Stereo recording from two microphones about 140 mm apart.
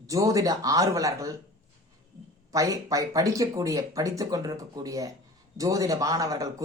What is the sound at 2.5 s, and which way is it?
A man's voice, 25° right (ahead or behind).